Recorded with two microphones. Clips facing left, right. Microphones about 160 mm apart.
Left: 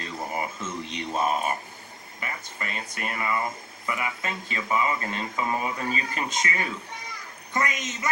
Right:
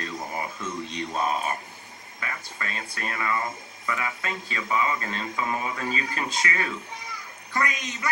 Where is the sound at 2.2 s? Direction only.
20° left (ahead or behind).